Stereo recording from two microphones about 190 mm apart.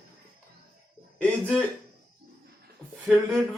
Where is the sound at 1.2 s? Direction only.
5° left (ahead or behind).